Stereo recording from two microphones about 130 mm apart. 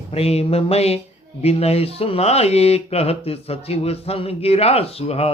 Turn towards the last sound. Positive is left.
turn(degrees=50)  # may be behind; listen again after turning